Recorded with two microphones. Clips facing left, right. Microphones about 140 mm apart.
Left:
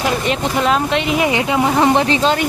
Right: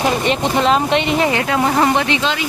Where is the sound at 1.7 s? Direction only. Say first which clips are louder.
Left 2 dB; centre (ahead or behind).